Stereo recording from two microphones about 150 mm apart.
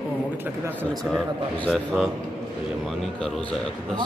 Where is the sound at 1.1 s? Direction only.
Centre (ahead or behind).